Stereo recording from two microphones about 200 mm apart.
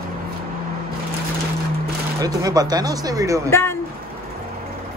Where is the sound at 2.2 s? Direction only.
20° right (ahead or behind).